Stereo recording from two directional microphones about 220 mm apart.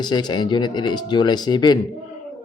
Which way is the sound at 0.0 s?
20° left (ahead or behind).